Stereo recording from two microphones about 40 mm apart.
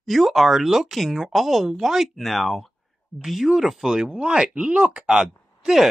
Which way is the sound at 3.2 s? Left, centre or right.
Centre.